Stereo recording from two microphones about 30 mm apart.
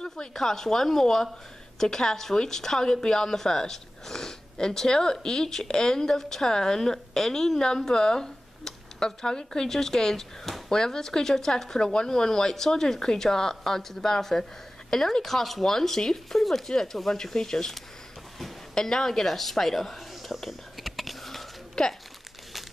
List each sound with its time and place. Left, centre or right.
0.3 s a woman's voice: centre
18.8 s a woman's voice: centre
21.8 s speech: left